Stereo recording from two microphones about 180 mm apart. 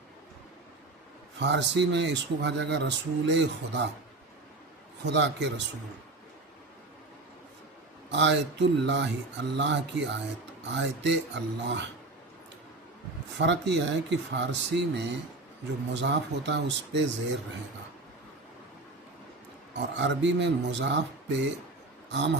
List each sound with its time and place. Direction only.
1.4 s speech: 75° right (ahead or behind)
5.0 s speech: 75° right (ahead or behind)
8.1 s speech: 80° right
13.3 s speech: 75° right (ahead or behind)
19.7 s speech: 80° right